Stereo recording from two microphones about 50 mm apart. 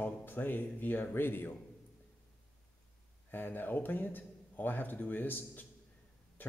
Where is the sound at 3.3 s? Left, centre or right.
Left.